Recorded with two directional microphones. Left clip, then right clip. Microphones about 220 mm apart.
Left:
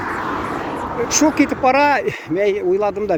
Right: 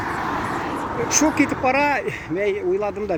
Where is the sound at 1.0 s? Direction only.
20° left (ahead or behind).